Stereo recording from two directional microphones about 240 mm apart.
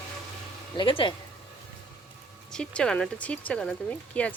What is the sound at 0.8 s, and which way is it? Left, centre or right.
Speech, left.